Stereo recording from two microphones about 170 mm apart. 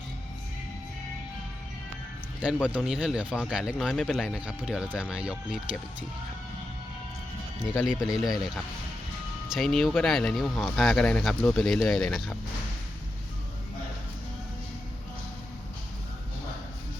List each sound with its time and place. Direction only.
2.4 s speech: 10° right (ahead or behind)
8.0 s speech: centre (ahead or behind)